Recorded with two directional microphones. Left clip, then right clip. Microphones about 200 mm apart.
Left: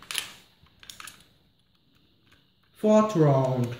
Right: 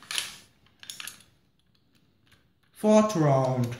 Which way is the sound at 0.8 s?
20° left (ahead or behind).